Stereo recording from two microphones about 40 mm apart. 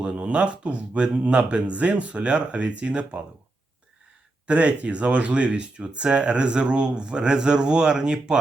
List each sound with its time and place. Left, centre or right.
0.0 s speech: right
4.4 s speech: right